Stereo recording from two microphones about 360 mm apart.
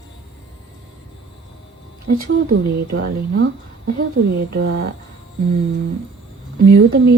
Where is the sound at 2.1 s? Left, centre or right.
Right.